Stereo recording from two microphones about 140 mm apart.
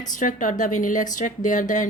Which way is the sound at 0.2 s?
70° left (ahead or behind).